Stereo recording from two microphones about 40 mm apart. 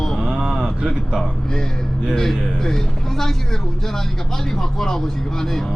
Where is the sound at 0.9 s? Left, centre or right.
Centre.